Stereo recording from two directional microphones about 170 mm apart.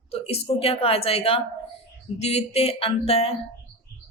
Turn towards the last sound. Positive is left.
turn(degrees=35)  # may be behind; listen again after turning